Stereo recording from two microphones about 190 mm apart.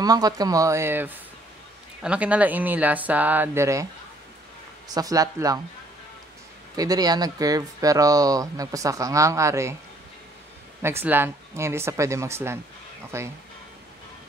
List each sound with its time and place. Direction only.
0.0 s speech: 20° right (ahead or behind)
4.8 s speech: 20° right (ahead or behind)
6.8 s speech: 20° right (ahead or behind)
10.8 s speech: 15° right (ahead or behind)